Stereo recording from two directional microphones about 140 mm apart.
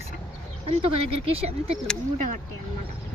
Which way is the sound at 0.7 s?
45° right (ahead or behind).